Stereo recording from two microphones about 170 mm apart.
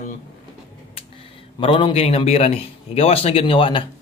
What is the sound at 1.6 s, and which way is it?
A man's voice, 30° left (ahead or behind).